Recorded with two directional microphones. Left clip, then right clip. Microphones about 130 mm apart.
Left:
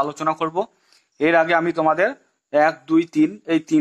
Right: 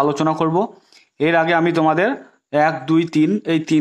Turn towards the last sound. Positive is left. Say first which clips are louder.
# right 3 dB
turn(degrees=-30)  # may be behind; listen again after turning